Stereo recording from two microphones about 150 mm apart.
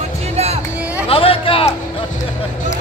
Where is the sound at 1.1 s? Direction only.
40° left (ahead or behind).